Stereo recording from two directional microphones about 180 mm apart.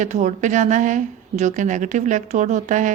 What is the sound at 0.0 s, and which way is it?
Speech, 40° right (ahead or behind).